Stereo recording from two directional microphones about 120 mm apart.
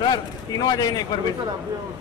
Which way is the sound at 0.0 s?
35° left (ahead or behind).